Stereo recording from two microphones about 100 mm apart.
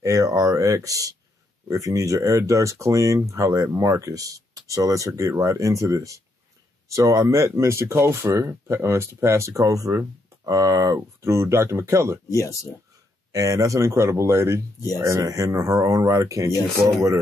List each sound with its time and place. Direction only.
0.0 s speech: 35° right (ahead or behind)
12.3 s speech: 35° left (ahead or behind)
13.3 s speech: 35° right (ahead or behind)